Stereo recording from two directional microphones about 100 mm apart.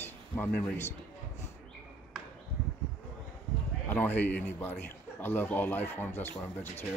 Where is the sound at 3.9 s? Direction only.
20° left (ahead or behind).